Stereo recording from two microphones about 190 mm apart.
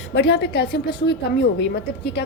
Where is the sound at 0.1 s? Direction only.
65° left (ahead or behind).